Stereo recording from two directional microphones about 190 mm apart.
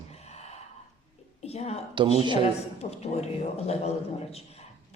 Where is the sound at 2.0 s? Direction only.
25° right (ahead or behind).